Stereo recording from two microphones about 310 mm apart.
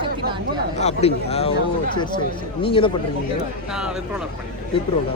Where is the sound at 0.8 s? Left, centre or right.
Left.